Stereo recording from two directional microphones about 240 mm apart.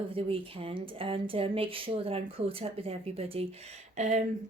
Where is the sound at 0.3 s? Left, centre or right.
Right.